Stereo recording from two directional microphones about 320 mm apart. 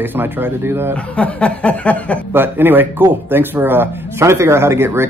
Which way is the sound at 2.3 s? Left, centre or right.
Centre.